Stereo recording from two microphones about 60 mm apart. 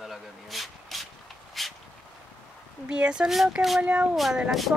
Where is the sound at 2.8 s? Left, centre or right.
Centre.